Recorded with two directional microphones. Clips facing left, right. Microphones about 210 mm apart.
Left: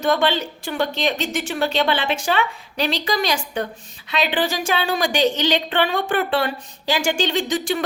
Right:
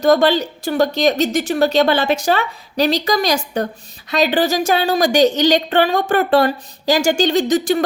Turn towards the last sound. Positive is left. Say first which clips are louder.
# right 6 dB
turn(degrees=-40)  # may be behind; listen again after turning